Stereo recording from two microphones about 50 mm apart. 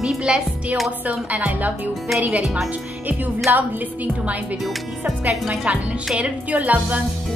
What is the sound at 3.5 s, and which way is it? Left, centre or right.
A woman's voice, right.